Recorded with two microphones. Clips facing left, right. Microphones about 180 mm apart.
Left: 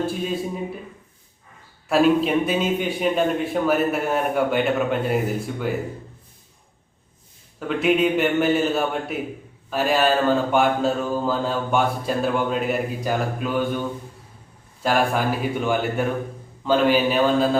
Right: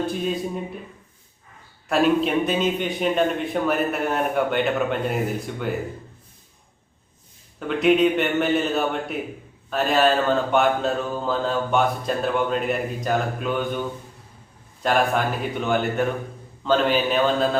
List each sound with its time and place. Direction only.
0.0 s a man's voice: centre (ahead or behind)
1.9 s a man's voice: centre (ahead or behind)
7.7 s a man's voice: 5° left (ahead or behind)
14.8 s a man's voice: 5° left (ahead or behind)